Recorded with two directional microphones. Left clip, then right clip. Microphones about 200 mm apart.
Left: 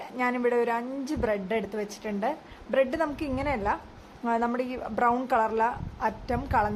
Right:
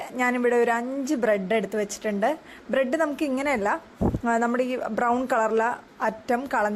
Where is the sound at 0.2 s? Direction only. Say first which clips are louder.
Right 4 dB; 20° right (ahead or behind).